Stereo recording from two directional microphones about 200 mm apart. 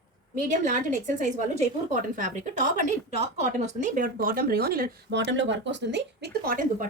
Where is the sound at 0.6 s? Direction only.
40° right (ahead or behind).